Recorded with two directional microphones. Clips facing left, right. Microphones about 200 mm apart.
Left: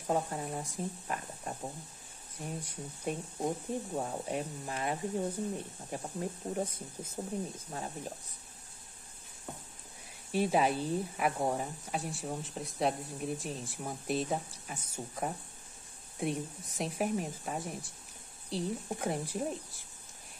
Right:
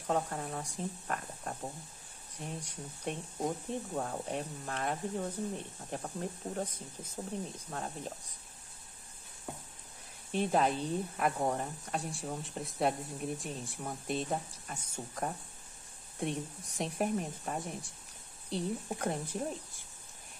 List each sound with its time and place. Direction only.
0.0 s speech: 10° left (ahead or behind)
10.3 s speech: 5° left (ahead or behind)